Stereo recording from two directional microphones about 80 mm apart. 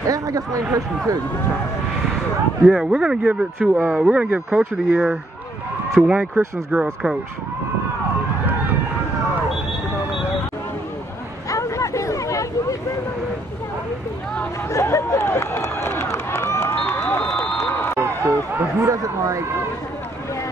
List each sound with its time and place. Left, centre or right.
0.0 s speech: right
2.6 s speech: centre
11.5 s a sound: left
14.7 s run: left
18.8 s a man's voice: right